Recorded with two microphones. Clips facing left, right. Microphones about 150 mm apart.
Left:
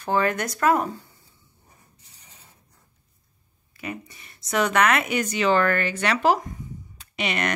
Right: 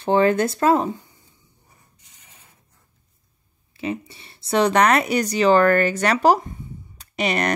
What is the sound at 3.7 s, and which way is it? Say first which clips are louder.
Speech: right 7 dB; 25° right (ahead or behind).